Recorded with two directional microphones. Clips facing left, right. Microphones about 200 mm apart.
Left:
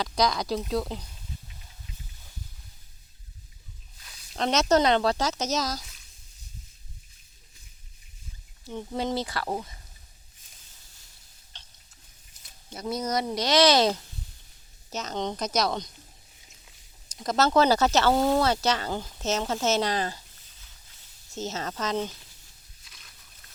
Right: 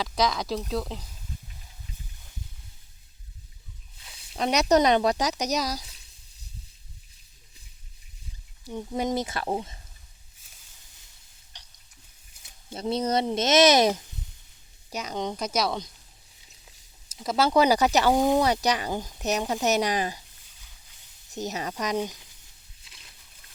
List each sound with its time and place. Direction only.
0.0 s speech: centre (ahead or behind)
3.9 s a sound: 25° right (ahead or behind)
4.4 s speech: 15° right (ahead or behind)
8.6 s speech: 10° right (ahead or behind)
11.5 s a sound: 15° right (ahead or behind)
12.7 s speech: 30° right (ahead or behind); by 15.9 s 5° right (ahead or behind)
17.2 s speech: 10° right (ahead or behind)
21.2 s speech: 15° right (ahead or behind)
22.8 s a sound: 25° right (ahead or behind)